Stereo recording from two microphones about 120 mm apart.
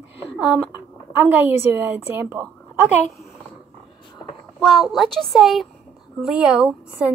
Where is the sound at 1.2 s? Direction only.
15° right (ahead or behind).